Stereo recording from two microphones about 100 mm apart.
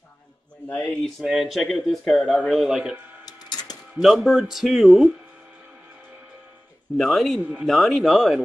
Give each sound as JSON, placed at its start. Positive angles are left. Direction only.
{"t": 0.7, "sound": "speech", "side_deg": 5}
{"t": 3.3, "sound": "a sound", "side_deg": 45}
{"t": 3.9, "sound": "speech", "side_deg": 0}
{"t": 7.0, "sound": "speech", "side_deg": 0}